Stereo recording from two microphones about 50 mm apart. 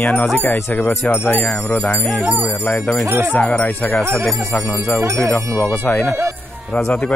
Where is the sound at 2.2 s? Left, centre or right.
Right.